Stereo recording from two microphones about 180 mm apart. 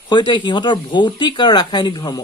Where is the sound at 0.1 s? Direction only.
25° left (ahead or behind).